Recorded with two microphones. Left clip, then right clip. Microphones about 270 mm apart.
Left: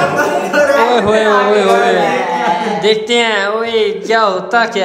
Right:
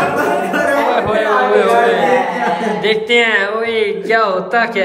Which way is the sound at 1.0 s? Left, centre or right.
Centre.